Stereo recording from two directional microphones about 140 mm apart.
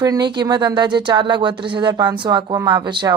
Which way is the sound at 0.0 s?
30° right (ahead or behind).